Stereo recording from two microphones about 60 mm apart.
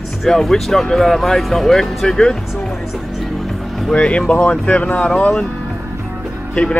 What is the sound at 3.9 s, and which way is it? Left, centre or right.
Speech, centre.